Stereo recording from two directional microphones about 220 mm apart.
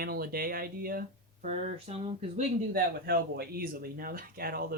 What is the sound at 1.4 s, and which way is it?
Speech, 30° right (ahead or behind).